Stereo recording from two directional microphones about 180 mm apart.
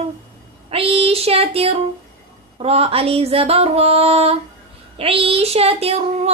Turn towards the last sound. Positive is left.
turn(degrees=-35)  # may be behind; listen again after turning